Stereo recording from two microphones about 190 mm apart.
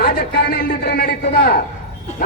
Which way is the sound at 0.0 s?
60° left (ahead or behind).